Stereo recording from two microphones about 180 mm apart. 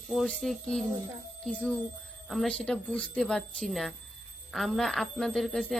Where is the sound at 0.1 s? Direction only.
5° left (ahead or behind).